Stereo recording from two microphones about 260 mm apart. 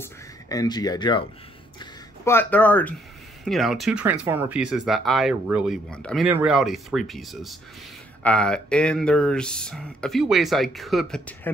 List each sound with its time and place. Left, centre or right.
0.0 s speech: centre